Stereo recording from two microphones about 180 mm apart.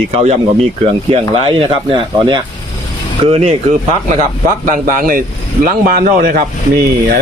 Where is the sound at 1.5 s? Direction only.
30° right (ahead or behind).